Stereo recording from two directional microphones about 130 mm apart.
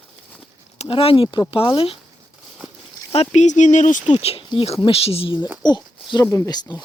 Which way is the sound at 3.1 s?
55° left (ahead or behind).